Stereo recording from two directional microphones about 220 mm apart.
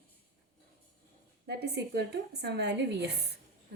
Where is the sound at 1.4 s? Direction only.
50° right (ahead or behind).